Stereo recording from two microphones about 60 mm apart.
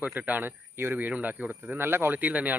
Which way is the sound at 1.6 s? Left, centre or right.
Right.